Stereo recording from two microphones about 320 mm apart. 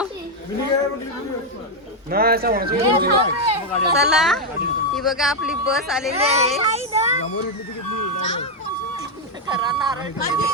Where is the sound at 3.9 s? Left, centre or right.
Centre.